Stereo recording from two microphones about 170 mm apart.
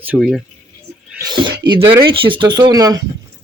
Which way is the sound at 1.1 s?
25° right (ahead or behind).